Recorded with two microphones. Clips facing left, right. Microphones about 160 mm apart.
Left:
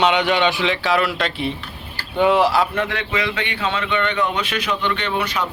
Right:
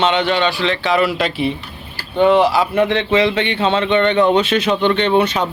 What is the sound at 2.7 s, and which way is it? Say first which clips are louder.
Speech: right 8 dB; 25° right (ahead or behind).